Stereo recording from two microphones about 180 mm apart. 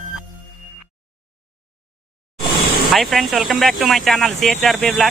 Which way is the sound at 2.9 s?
Centre (ahead or behind).